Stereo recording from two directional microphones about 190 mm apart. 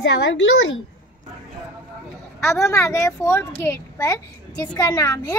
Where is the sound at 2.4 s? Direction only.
15° left (ahead or behind).